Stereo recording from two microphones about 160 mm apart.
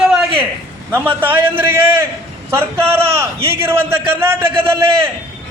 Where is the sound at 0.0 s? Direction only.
5° right (ahead or behind).